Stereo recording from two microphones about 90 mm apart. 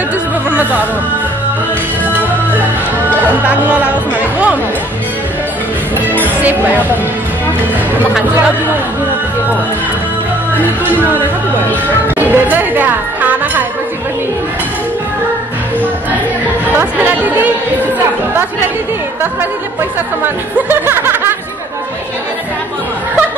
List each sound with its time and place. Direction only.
0.5 s music: 15° right (ahead or behind)
3.4 s music: 20° right (ahead or behind)
10.9 s speech: 20° right (ahead or behind)
12.2 s music: 20° right (ahead or behind)
16.7 s speech: 20° right (ahead or behind)
20.5 s music: 20° right (ahead or behind)